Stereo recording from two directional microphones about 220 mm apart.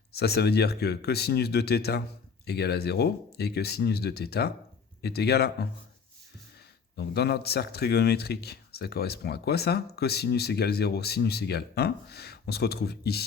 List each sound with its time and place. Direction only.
0.1 s speech: 45° left (ahead or behind)
6.9 s speech: 45° left (ahead or behind)